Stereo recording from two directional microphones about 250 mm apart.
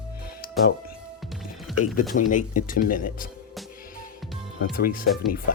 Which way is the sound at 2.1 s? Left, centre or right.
Left.